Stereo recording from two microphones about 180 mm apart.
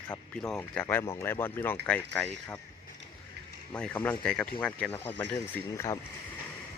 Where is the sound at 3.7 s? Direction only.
5° left (ahead or behind).